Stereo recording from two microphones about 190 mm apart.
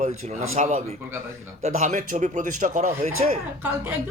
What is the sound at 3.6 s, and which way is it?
Speech, 10° right (ahead or behind).